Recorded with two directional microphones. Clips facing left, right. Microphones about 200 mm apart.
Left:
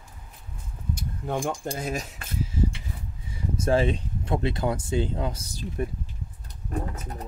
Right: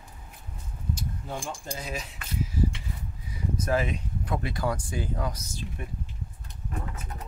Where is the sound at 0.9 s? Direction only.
55° left (ahead or behind).